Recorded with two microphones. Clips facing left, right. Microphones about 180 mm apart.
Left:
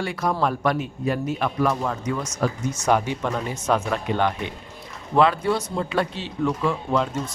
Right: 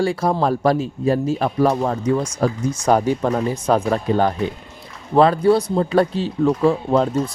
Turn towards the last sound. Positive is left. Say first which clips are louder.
# right 6 dB
turn(degrees=-35)  # may be behind; listen again after turning